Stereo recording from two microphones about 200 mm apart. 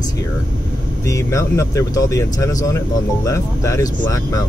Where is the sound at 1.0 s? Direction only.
15° left (ahead or behind).